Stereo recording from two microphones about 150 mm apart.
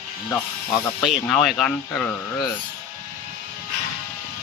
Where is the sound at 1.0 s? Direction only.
Centre (ahead or behind).